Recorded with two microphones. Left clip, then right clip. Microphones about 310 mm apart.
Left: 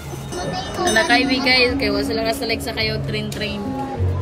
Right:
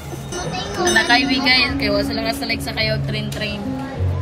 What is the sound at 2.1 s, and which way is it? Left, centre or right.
Speech, right.